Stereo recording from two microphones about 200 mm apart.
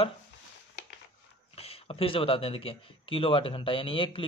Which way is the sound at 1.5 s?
30° left (ahead or behind).